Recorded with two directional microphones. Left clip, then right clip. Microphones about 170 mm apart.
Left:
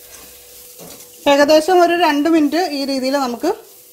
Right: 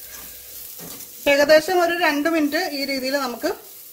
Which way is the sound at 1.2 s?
30° left (ahead or behind).